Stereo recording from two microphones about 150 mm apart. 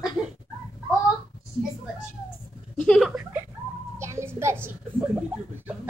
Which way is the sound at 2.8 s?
5° left (ahead or behind).